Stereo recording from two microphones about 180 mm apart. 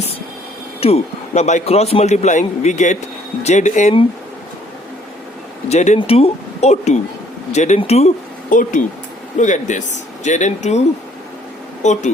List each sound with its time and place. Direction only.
0.8 s a man's voice: 35° left (ahead or behind)
5.6 s a man's voice: 40° left (ahead or behind)
11.8 s a man's voice: 40° left (ahead or behind)